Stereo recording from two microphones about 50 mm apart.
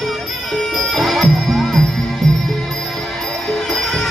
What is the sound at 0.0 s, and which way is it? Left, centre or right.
Music, centre.